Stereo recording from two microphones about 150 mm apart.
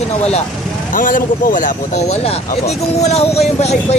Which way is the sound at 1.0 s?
65° left (ahead or behind).